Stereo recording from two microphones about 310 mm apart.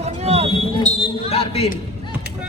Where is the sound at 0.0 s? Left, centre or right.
Right.